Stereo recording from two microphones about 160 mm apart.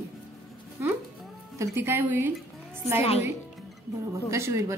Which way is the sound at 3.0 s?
40° left (ahead or behind).